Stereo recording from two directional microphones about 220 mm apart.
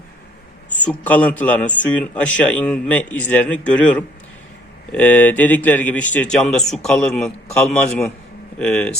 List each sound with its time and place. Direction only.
0.7 s a man's voice: 5° left (ahead or behind)